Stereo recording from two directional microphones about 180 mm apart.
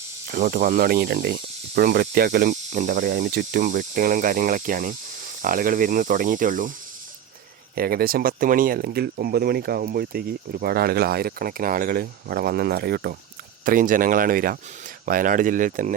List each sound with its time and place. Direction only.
0.3 s speech: 50° right (ahead or behind)
7.8 s speech: 55° right (ahead or behind)
13.7 s speech: 50° right (ahead or behind)